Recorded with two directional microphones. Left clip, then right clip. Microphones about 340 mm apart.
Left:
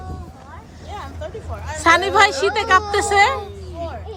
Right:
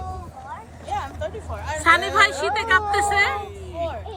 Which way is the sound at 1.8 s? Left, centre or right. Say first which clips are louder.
Left 3 dB; centre.